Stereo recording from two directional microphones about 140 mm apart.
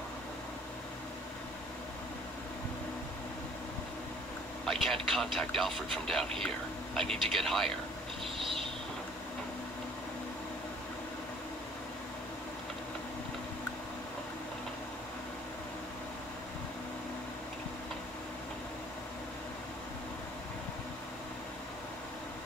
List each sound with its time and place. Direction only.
4.6 s speech: 5° left (ahead or behind)